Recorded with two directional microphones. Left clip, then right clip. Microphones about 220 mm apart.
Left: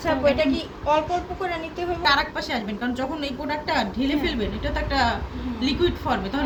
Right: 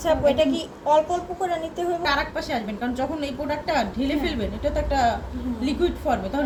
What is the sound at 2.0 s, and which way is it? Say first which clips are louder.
A woman's voice: left 7 dB; 10° left (ahead or behind).